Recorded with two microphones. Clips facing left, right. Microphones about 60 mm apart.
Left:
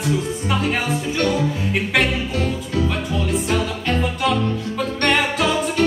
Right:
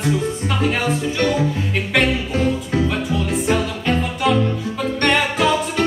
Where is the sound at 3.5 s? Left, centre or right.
Centre.